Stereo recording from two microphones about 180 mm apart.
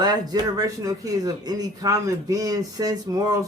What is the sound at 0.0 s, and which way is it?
Speech, 20° right (ahead or behind).